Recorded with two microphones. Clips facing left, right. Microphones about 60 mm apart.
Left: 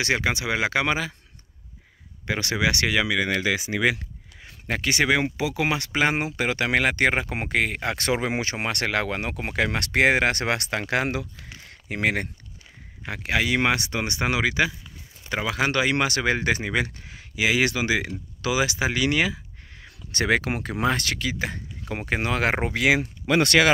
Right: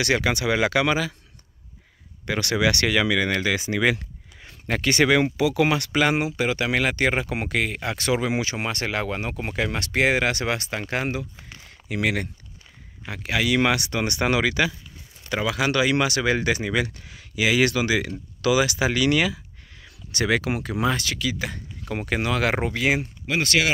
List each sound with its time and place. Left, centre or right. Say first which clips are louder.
0.0 s speech: right 2 dB; left
2.2 s speech: right 2 dB; centre
6.2 s speech: right 1 dB; left
11.9 s speech: even; left
15.5 s speech: right 1 dB; left
21.8 s speech: right 1 dB; centre; by 22.8 s left